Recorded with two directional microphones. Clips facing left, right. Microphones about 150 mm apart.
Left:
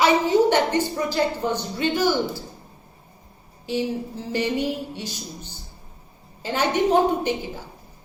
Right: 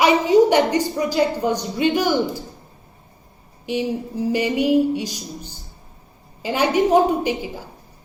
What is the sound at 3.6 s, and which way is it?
A woman's voice, 15° right (ahead or behind).